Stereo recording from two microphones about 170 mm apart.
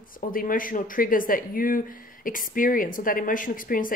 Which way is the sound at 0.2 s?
55° left (ahead or behind).